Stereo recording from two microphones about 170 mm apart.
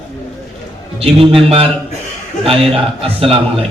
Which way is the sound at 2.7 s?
35° right (ahead or behind).